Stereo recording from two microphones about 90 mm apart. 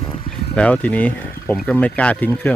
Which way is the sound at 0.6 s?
15° left (ahead or behind).